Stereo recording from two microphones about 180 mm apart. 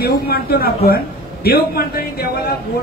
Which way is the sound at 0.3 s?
60° left (ahead or behind).